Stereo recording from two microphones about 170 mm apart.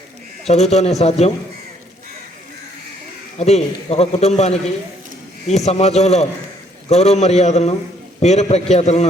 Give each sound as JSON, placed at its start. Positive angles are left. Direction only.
{"t": 0.4, "sound": "a man's voice", "side_deg": 40}
{"t": 3.3, "sound": "a man's voice", "side_deg": 40}